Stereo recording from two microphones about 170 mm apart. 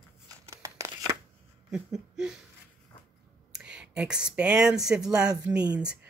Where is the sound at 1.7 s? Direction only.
5° right (ahead or behind).